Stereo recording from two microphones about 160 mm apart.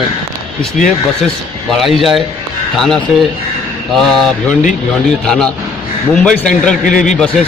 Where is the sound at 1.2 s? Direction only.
Centre (ahead or behind).